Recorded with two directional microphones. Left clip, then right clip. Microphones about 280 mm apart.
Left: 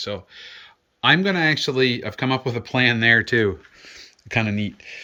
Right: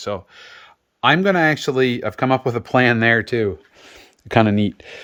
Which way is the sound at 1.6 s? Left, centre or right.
Centre.